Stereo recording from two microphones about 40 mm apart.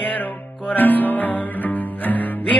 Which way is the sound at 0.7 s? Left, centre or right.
Left.